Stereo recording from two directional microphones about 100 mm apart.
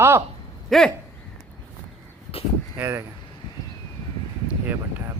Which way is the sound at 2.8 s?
25° right (ahead or behind).